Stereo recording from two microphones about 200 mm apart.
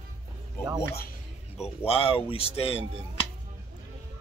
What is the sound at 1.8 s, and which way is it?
Speech, 30° left (ahead or behind).